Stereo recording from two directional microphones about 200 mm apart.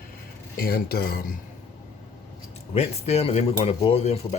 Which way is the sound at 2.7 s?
30° left (ahead or behind).